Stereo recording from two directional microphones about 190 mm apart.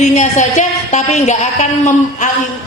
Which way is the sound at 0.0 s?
40° left (ahead or behind).